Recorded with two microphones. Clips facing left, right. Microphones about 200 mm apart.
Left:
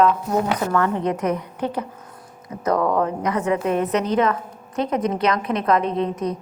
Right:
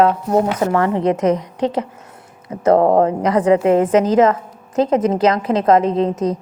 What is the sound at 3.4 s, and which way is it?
Speech, 90° right.